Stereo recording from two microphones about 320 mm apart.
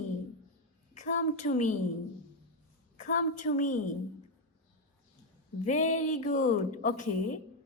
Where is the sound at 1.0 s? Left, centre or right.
Left.